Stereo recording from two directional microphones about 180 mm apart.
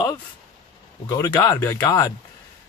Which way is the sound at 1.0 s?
20° left (ahead or behind).